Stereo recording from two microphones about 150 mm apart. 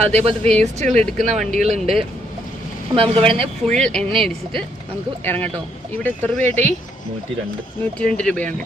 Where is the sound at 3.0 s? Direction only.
40° right (ahead or behind).